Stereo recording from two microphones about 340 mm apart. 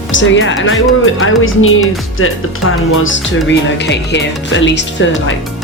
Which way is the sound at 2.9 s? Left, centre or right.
Left.